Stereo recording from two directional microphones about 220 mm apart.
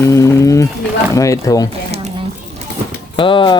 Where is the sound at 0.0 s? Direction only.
15° left (ahead or behind).